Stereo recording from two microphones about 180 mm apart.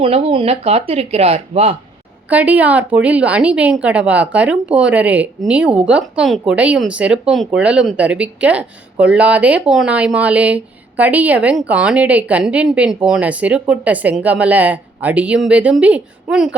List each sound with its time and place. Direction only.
0.0 s speech: 35° right (ahead or behind)
2.3 s a woman's voice: 10° right (ahead or behind)